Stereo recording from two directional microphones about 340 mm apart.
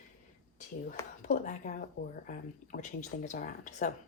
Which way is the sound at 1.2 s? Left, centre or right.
Left.